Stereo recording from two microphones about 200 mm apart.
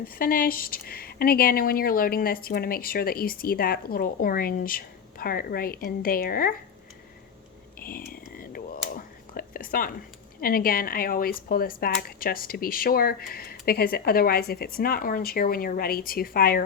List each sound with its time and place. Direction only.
0.0 s speech: 45° left (ahead or behind)
7.8 s a sound: 45° left (ahead or behind)
8.4 s whispering: 45° left (ahead or behind)
10.4 s speech: 45° left (ahead or behind)